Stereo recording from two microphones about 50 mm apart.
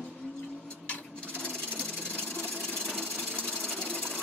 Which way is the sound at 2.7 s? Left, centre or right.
Centre.